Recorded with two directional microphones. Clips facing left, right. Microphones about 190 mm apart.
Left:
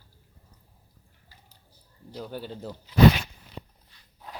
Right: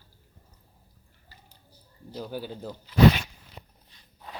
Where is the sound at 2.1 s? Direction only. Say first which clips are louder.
Right 1 dB; 5° right (ahead or behind).